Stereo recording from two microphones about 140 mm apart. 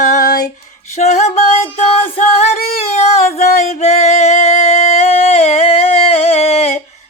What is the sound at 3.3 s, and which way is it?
Music, 55° left (ahead or behind).